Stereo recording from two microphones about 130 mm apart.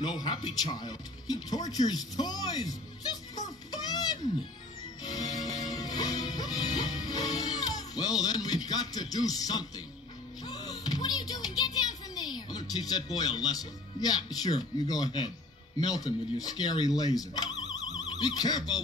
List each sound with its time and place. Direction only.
0.0 s speech: 30° left (ahead or behind)
5.0 s music: 30° left (ahead or behind)
12.2 s speech: 30° left (ahead or behind)